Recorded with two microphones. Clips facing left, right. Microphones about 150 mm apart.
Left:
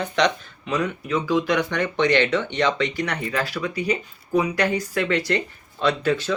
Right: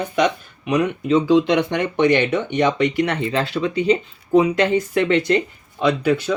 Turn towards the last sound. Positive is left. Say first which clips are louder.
# right 3 dB
turn(degrees=-15)  # may be behind; listen again after turning